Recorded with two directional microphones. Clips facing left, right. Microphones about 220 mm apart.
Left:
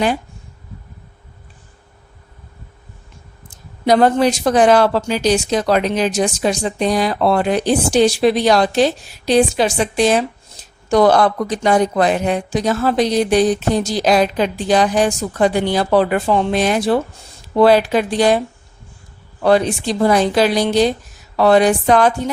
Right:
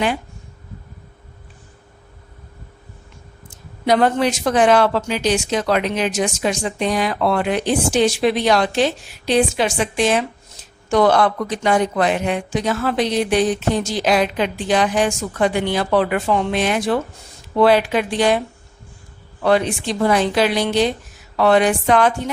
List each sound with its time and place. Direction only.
3.5 s speech: 35° left (ahead or behind)